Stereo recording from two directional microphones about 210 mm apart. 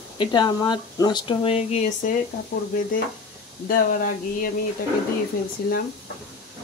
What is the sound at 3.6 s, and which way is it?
Speech, 45° left (ahead or behind).